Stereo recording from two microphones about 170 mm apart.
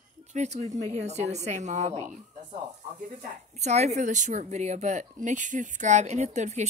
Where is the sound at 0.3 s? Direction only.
40° right (ahead or behind).